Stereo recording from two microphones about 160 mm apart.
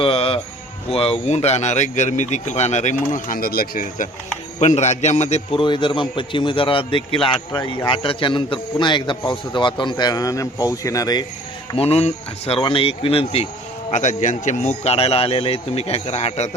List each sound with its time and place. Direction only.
0.0 s music: 35° left (ahead or behind)
0.9 s speech: 40° left (ahead or behind); by 4.1 s 55° left (ahead or behind)
4.6 s a man's voice: 45° left (ahead or behind); by 11.3 s 25° left (ahead or behind)
11.7 s a man's voice: 40° left (ahead or behind)
13.9 s a man's voice: 50° left (ahead or behind)